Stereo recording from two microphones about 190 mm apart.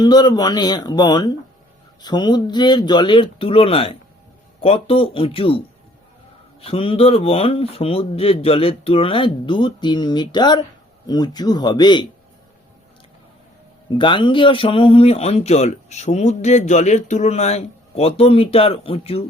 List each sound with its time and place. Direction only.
0.0 s speech: 20° left (ahead or behind)
14.0 s speech: 25° left (ahead or behind)